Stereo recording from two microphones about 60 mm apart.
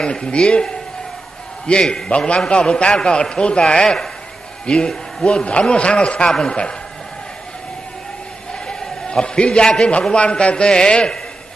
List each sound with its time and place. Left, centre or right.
0.0 s a man's voice: centre
8.6 s a man's voice: centre